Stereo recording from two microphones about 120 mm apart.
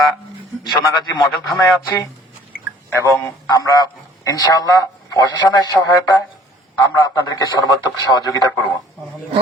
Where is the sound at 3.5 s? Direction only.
30° left (ahead or behind).